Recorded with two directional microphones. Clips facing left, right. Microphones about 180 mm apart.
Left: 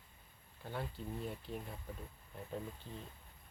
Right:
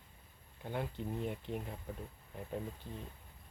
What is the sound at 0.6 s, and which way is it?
Speech, 15° right (ahead or behind).